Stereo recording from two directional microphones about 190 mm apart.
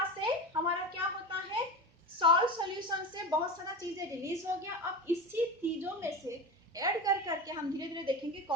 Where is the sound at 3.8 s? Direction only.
15° right (ahead or behind).